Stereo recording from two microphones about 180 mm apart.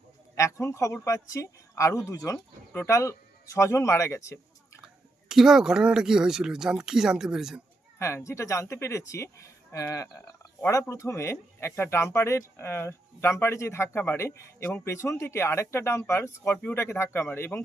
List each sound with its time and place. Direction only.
0.3 s speech: 15° left (ahead or behind)
5.3 s speech: 5° right (ahead or behind)
7.9 s speech: 15° left (ahead or behind)